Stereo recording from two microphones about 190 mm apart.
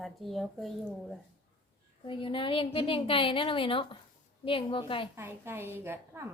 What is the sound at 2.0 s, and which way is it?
A woman's voice, 25° left (ahead or behind).